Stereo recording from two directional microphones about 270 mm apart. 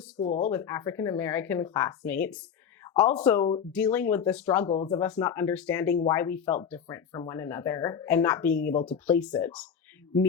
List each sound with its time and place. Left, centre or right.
0.2 s speech: left
0.5 s speech: centre
2.8 s a sound: centre
3.2 s speech: centre